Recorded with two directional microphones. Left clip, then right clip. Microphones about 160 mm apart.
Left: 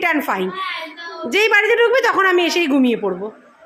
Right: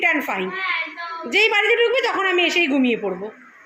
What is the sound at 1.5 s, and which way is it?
A woman's voice, 25° left (ahead or behind).